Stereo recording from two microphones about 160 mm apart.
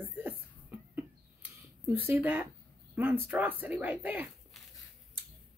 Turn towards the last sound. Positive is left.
turn(degrees=-10)  # may be behind; listen again after turning